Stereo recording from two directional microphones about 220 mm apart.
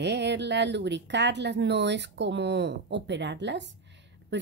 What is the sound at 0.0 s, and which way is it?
Speech, 50° right (ahead or behind).